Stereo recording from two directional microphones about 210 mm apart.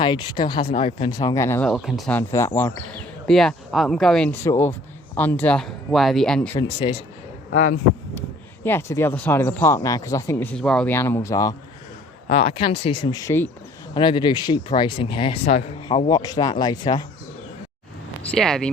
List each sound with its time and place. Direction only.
0.0 s speech: 20° left (ahead or behind)
3.2 s speech: centre (ahead or behind)
6.6 s speech: 25° left (ahead or behind)
7.5 s speech: 40° left (ahead or behind)
8.6 s speech: 10° left (ahead or behind)
12.3 s speech: 30° left (ahead or behind)
18.2 s speech: 5° left (ahead or behind)